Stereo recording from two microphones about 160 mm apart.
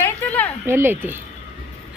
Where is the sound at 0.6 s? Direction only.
15° right (ahead or behind).